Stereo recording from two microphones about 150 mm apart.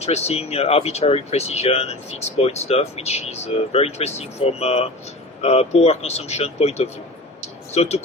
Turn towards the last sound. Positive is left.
turn(degrees=45)  # may be behind; listen again after turning